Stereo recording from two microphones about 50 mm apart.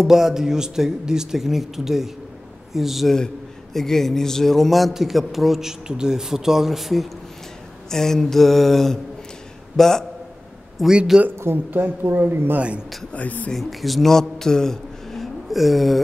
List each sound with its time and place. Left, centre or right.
0.0 s a man's voice: centre
3.7 s a man's voice: centre
7.9 s a sound: centre
10.8 s a man's voice: centre
11.3 s speech: right
12.5 s a man's voice: right
13.1 s speech: left
13.5 s a man's voice: centre